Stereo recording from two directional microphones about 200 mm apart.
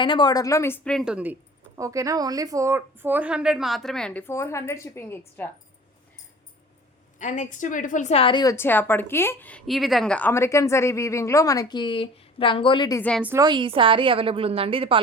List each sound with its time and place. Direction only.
0.0 s a woman's voice: 25° left (ahead or behind)
7.2 s a woman's voice: 40° left (ahead or behind); by 13.0 s 20° left (ahead or behind)
13.0 s a woman's voice: 5° left (ahead or behind)
13.2 s a woman's voice: 15° right (ahead or behind)